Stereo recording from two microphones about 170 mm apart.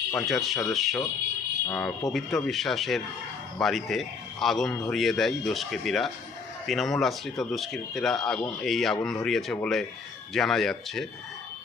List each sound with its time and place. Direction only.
0.1 s speech: centre (ahead or behind)
1.6 s speech: 10° left (ahead or behind)
2.1 s speech: centre (ahead or behind)